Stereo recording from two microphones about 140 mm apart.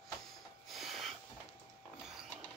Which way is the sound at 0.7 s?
Centre (ahead or behind).